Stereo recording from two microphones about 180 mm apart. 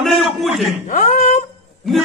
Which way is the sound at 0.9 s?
50° left (ahead or behind).